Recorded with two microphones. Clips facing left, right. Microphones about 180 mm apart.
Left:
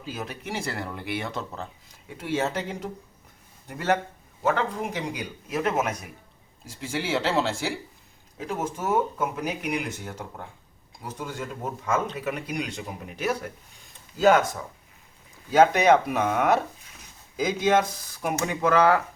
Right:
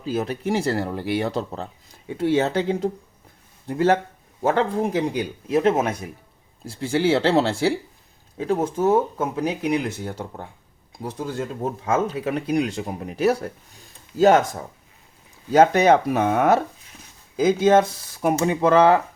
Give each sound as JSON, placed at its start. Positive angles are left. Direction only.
{"t": 0.1, "sound": "speech", "side_deg": -35}